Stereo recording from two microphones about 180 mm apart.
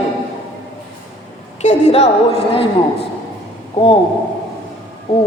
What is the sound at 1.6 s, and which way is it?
A woman's voice, 35° left (ahead or behind).